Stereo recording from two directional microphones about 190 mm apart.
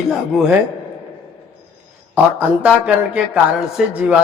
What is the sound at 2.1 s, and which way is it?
A man's voice, 5° right (ahead or behind).